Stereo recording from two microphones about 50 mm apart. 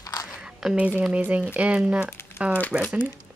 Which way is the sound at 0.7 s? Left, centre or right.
Right.